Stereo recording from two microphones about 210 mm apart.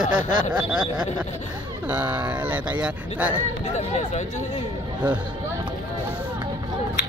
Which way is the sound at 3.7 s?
30° left (ahead or behind).